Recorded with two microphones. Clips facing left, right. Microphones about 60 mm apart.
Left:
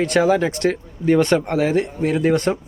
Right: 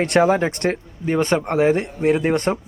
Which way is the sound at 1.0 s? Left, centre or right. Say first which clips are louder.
Left 3 dB; centre.